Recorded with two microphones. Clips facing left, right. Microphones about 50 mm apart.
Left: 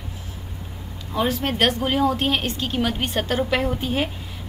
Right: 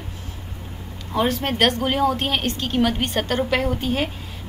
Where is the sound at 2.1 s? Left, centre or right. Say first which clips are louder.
Even; centre.